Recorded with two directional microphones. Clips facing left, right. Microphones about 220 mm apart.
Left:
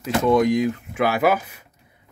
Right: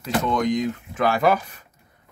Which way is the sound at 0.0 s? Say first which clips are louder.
Left 5 dB; 10° left (ahead or behind).